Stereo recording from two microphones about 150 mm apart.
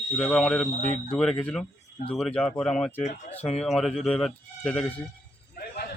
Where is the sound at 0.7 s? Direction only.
50° left (ahead or behind).